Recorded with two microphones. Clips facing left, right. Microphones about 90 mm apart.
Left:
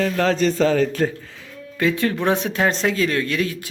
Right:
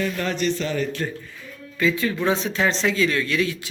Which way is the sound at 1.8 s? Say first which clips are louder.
Left 2 dB; 65° left (ahead or behind).